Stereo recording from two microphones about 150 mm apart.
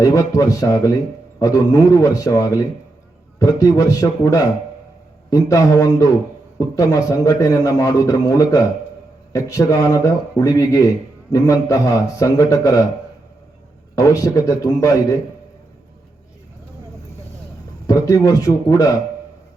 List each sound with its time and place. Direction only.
0.0 s speech: 20° left (ahead or behind)
13.9 s speech: 25° left (ahead or behind)
17.8 s speech: 20° left (ahead or behind)